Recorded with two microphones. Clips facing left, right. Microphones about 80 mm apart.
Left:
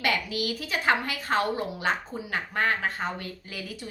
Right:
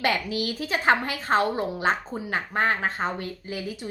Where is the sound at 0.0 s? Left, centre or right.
Right.